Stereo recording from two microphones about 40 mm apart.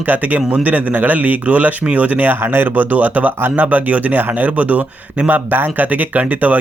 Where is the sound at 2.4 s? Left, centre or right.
Right.